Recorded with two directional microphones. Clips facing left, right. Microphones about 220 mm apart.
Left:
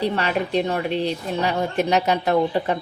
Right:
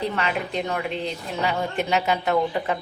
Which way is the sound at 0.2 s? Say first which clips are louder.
Left 4 dB; 35° left (ahead or behind).